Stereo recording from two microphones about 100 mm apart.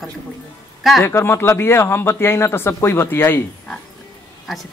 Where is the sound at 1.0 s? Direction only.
25° left (ahead or behind).